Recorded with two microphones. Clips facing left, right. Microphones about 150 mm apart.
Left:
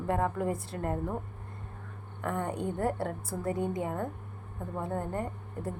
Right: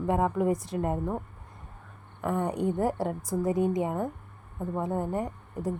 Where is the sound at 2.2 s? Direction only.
15° right (ahead or behind).